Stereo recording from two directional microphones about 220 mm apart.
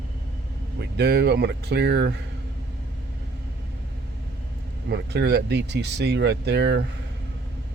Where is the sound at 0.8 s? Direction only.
50° right (ahead or behind).